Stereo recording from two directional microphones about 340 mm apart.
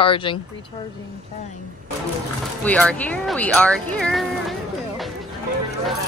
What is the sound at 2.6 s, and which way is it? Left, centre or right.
A woman's voice, centre.